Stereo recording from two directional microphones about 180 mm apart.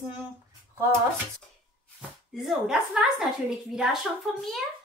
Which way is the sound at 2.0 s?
5° right (ahead or behind).